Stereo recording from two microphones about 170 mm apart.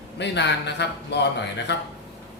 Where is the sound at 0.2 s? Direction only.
90° left.